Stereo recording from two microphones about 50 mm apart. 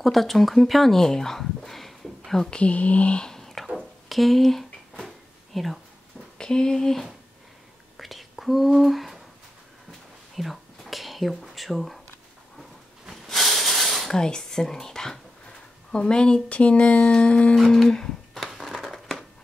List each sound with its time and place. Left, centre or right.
0.0 s speech: centre
2.5 s speech: left
3.3 s whispering: centre
3.7 s a sound: centre
5.0 s drawer open or close: centre
6.3 s speech: centre
8.0 s whispering: centre
10.3 s whispering: centre
13.1 s a sound: centre
15.9 s a woman's voice: centre
17.6 s a sound: centre
18.4 s a sound: centre